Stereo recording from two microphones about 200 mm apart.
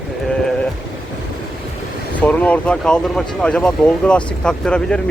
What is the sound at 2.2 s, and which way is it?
Speech, 5° left (ahead or behind).